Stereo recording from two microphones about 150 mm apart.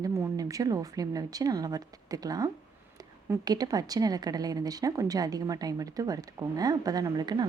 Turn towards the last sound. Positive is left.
turn(degrees=-25)  # may be behind; listen again after turning